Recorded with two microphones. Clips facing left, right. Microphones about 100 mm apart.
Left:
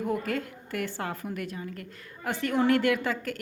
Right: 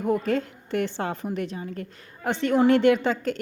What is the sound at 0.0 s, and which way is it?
A woman's voice, 25° right (ahead or behind).